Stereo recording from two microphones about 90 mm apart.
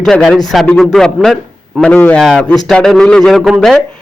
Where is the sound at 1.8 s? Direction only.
10° left (ahead or behind).